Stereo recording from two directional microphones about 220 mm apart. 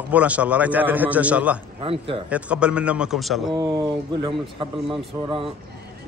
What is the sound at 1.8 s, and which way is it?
Speech, 25° right (ahead or behind).